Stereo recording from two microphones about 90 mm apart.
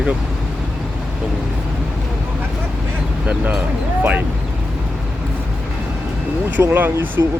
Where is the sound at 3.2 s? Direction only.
10° right (ahead or behind).